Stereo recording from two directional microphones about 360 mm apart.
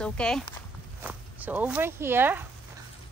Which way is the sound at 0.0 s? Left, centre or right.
Centre.